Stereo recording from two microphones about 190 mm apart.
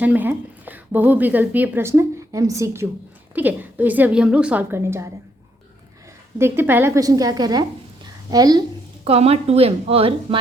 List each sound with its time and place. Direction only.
0.0 s a woman's voice: 10° right (ahead or behind)
6.4 s a woman's voice: 10° right (ahead or behind)
8.0 s a sound: 20° right (ahead or behind)
9.0 s a woman's voice: 35° right (ahead or behind)